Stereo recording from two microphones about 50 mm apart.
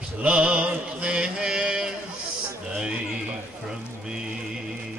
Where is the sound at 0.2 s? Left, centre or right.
Right.